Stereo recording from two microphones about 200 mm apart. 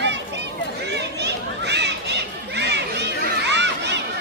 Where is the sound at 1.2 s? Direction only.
60° right (ahead or behind).